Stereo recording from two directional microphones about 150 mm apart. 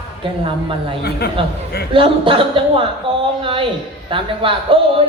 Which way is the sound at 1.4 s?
35° right (ahead or behind).